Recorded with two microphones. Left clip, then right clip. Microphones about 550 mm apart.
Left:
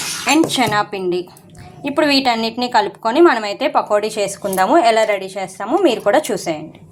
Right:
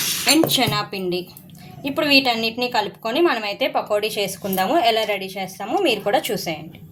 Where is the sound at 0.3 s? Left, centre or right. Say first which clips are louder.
Left 3 dB; right.